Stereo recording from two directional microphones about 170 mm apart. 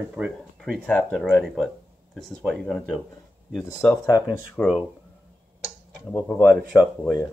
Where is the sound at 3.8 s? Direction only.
10° left (ahead or behind).